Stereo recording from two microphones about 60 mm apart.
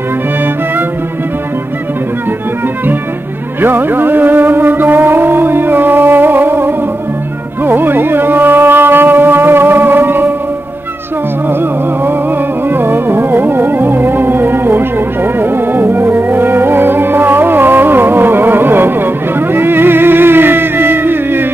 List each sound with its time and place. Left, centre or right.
3.6 s music: right
12.6 s music: right